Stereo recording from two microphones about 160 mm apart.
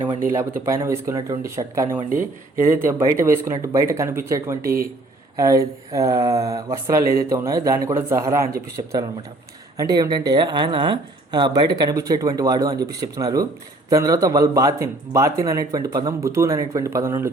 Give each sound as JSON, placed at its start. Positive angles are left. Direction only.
{"t": 0.3, "sound": "a woman's voice", "side_deg": -15}
{"t": 4.6, "sound": "speech", "side_deg": -65}
{"t": 5.4, "sound": "a woman's voice", "side_deg": -20}
{"t": 7.0, "sound": "speech", "side_deg": -65}
{"t": 7.3, "sound": "a woman's voice", "side_deg": -20}